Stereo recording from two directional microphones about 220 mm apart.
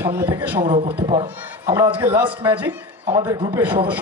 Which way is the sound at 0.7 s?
25° right (ahead or behind).